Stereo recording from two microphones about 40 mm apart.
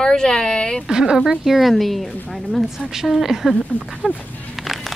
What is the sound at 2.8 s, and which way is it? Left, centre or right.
A woman's voice, centre.